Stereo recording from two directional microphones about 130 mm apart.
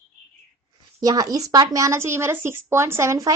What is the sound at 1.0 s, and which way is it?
A woman's voice, 25° right (ahead or behind).